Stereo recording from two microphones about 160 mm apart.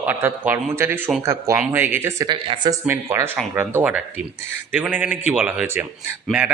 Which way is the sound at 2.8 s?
15° right (ahead or behind).